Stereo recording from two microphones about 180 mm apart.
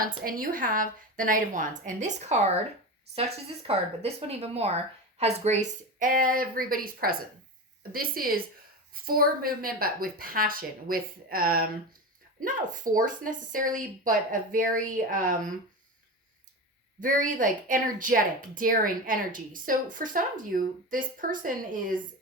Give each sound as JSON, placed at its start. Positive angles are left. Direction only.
{"t": 0.0, "sound": "a woman's voice", "side_deg": -50}
{"t": 17.0, "sound": "a woman's voice", "side_deg": -50}